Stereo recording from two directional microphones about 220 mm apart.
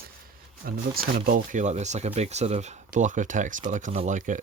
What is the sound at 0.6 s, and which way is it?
Speech, 40° right (ahead or behind).